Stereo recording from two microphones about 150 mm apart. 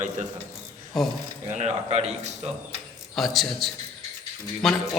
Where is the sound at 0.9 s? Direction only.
Centre (ahead or behind).